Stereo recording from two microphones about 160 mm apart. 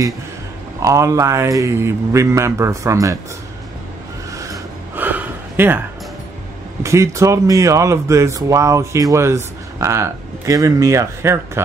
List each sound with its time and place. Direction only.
0.7 s a man's voice: 20° right (ahead or behind)
4.3 s gasp: 20° right (ahead or behind)
6.8 s speech: 20° right (ahead or behind)